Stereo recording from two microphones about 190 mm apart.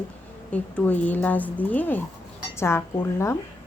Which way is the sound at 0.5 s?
10° left (ahead or behind).